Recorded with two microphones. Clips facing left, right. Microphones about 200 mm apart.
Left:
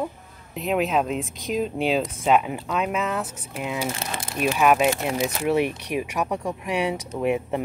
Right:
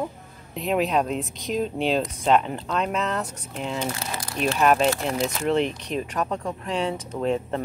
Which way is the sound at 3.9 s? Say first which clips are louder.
Left 1 dB; 25° left (ahead or behind).